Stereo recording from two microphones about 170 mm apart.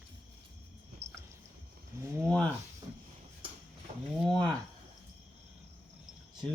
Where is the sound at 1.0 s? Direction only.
40° right (ahead or behind).